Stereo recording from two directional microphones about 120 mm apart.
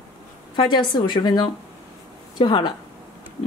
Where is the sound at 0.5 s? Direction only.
40° left (ahead or behind).